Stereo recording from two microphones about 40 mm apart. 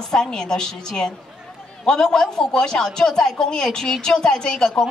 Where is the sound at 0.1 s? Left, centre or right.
Centre.